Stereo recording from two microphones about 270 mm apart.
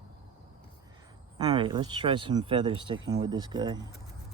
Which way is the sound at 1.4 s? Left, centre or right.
Centre.